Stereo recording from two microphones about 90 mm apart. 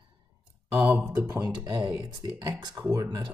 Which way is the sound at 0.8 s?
15° right (ahead or behind).